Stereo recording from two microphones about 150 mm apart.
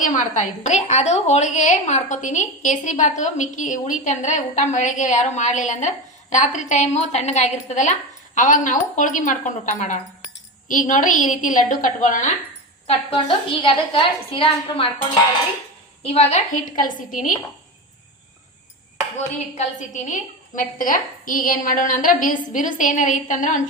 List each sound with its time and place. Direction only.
0.0 s a woman's voice: 55° left (ahead or behind)
12.9 s a woman's voice: 40° left (ahead or behind)
16.1 s a woman's voice: 55° left (ahead or behind)
19.5 s a woman's voice: 55° left (ahead or behind)